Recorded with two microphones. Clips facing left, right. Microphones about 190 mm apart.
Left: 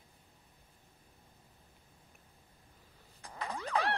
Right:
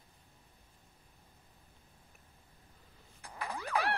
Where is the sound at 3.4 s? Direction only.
20° left (ahead or behind).